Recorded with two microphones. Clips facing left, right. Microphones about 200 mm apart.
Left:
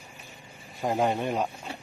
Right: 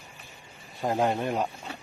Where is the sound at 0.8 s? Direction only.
Centre (ahead or behind).